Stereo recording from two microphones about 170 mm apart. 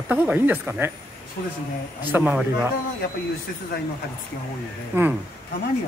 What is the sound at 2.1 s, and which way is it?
Speech, 10° right (ahead or behind).